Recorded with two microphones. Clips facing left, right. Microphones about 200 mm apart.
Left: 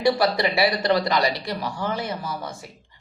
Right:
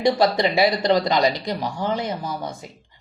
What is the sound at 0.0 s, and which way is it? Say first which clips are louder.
Speech: right 2 dB; 20° right (ahead or behind).